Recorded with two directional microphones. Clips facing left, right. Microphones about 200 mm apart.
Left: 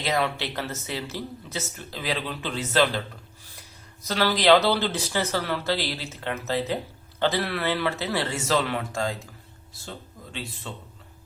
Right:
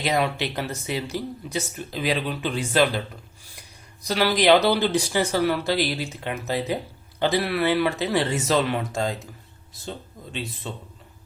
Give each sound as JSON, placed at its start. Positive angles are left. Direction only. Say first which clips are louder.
{"t": 0.0, "sound": "speech", "louder": "right 2 dB", "side_deg": -15}
{"t": 4.0, "sound": "speech", "louder": "right 2 dB", "side_deg": -15}
{"t": 10.7, "sound": "a man's voice", "louder": "right 3 dB", "side_deg": -20}